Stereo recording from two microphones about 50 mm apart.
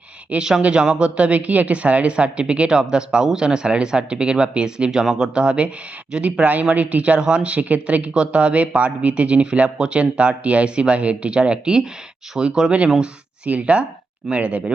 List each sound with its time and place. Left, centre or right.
0.6 s speech: right
6.4 s speech: right